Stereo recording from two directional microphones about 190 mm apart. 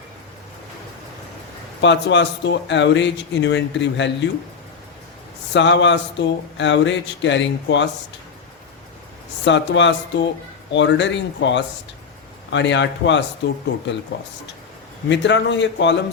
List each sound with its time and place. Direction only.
1.8 s speech: 70° left (ahead or behind)
5.5 s speech: 70° left (ahead or behind)
9.4 s speech: 70° left (ahead or behind)
15.1 s speech: 70° left (ahead or behind)